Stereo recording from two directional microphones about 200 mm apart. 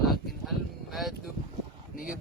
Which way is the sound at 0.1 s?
Centre (ahead or behind).